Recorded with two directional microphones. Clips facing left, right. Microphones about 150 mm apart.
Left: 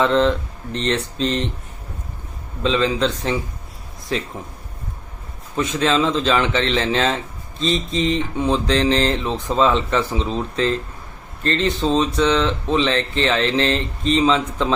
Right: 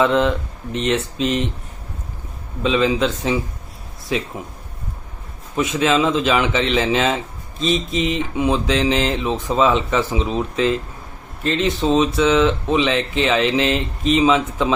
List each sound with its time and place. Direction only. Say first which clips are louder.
0.0 s speech: even; 10° right (ahead or behind)
2.6 s speech: right 1 dB; 5° right (ahead or behind)
5.5 s speech: right 1 dB; 5° right (ahead or behind)